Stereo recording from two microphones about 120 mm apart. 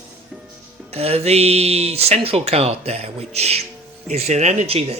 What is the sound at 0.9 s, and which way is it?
Speech, 60° right (ahead or behind).